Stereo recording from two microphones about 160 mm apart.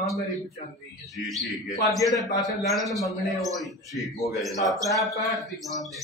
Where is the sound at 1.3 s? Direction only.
Centre (ahead or behind).